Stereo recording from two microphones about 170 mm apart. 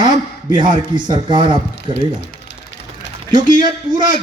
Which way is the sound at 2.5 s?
85° left.